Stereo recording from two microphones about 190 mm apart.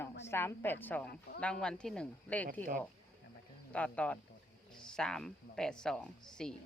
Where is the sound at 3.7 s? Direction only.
5° left (ahead or behind).